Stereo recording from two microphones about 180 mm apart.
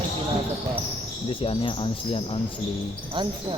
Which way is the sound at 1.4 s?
30° left (ahead or behind).